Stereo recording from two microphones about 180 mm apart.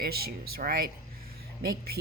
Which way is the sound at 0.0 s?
60° right (ahead or behind).